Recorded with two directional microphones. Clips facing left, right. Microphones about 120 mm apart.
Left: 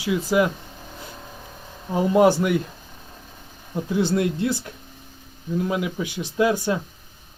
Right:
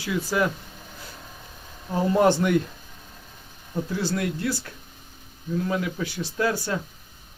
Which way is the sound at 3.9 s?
20° left (ahead or behind).